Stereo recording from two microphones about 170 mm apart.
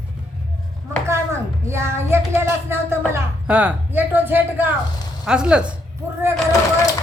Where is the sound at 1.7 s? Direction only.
15° right (ahead or behind).